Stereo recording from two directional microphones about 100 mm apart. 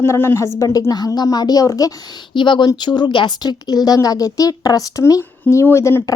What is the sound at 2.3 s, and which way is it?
Speech, 55° left (ahead or behind).